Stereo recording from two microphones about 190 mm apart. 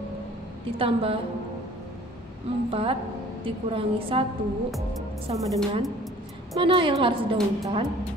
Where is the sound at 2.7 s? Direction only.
30° right (ahead or behind).